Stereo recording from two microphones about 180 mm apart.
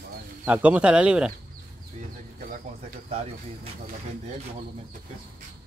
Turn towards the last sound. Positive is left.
turn(degrees=-35)  # may be behind; listen again after turning